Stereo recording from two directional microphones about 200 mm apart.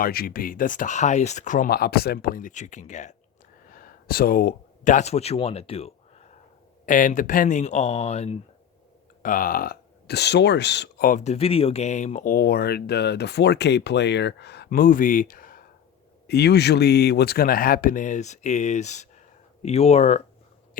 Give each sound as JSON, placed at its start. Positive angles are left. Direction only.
{"t": 0.0, "sound": "speech", "side_deg": 50}
{"t": 9.2, "sound": "speech", "side_deg": 45}
{"t": 16.2, "sound": "speech", "side_deg": 55}